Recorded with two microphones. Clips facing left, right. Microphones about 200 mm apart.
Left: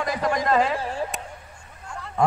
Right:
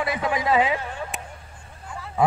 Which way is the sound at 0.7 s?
30° left (ahead or behind).